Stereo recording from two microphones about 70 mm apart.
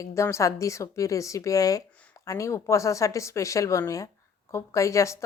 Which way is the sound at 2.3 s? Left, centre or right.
Left.